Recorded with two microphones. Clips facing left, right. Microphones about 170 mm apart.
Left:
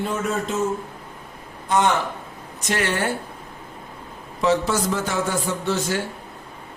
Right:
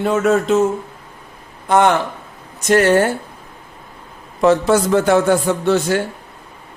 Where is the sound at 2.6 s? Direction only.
45° right (ahead or behind).